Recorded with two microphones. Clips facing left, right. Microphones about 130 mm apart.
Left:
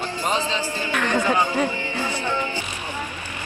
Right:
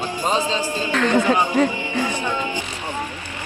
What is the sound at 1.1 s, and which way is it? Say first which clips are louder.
Speech: right 2 dB; 15° right (ahead or behind).